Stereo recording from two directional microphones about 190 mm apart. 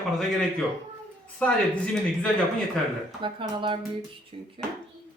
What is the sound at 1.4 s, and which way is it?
Speech, 5° left (ahead or behind).